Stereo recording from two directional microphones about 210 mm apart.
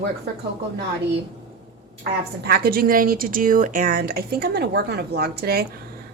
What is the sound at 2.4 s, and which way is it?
Speech, 45° right (ahead or behind).